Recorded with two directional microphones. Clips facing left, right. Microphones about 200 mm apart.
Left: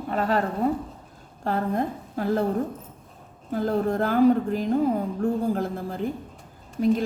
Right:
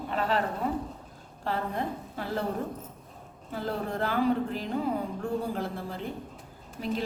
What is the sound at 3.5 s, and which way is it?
A woman's voice, 45° left (ahead or behind).